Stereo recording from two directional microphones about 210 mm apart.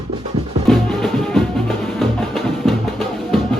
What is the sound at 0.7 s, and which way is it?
Music, centre (ahead or behind).